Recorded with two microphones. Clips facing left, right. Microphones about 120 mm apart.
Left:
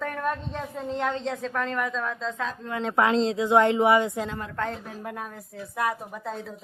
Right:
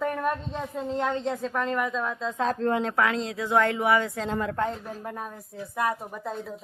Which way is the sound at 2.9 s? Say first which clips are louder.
Left 4 dB; 25° left (ahead or behind).